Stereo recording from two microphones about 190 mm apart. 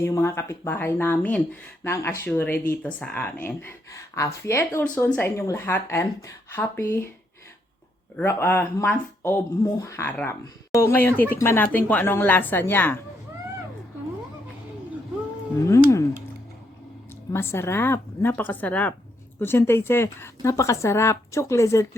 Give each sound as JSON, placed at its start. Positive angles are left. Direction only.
{"t": 0.0, "sound": "speech", "side_deg": 15}
{"t": 8.1, "sound": "speech", "side_deg": 10}
{"t": 15.6, "sound": "speech", "side_deg": 15}
{"t": 17.3, "sound": "speech", "side_deg": 15}